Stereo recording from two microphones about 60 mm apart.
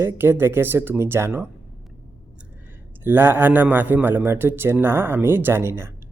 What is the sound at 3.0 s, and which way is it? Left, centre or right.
Speech, right.